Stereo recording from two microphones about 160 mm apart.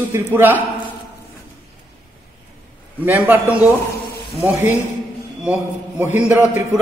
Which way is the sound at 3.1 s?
10° right (ahead or behind).